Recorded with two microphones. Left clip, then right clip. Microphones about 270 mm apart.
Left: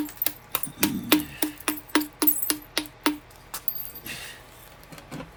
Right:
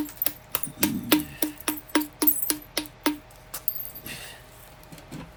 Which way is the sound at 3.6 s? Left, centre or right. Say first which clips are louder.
Left 1 dB; centre.